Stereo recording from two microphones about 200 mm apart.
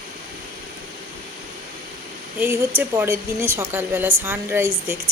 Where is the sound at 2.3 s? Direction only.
10° right (ahead or behind).